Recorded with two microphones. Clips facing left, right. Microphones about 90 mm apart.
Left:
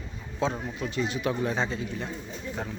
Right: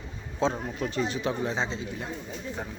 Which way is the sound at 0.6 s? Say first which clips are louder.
Right 1 dB; 40° right (ahead or behind).